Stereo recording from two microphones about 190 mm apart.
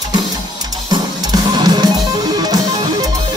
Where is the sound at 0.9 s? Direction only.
20° right (ahead or behind).